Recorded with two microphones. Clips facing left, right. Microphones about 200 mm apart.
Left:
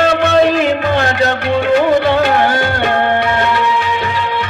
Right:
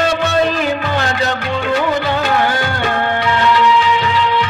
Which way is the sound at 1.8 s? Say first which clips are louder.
Left 5 dB; 55° left (ahead or behind).